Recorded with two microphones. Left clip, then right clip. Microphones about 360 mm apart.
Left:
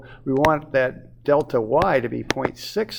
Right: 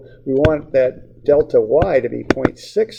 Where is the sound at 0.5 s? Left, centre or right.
Left.